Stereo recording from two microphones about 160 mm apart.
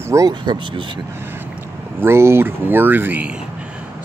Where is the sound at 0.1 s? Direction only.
25° right (ahead or behind).